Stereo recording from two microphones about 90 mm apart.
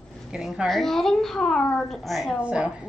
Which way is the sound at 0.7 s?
5° left (ahead or behind).